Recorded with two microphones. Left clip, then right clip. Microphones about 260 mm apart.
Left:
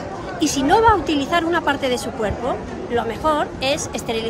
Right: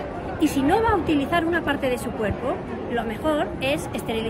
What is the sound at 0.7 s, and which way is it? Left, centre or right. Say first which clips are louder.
A woman's voice: left 7 dB; centre.